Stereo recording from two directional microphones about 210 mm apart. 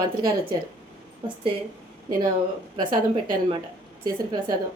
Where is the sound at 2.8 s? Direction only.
20° right (ahead or behind).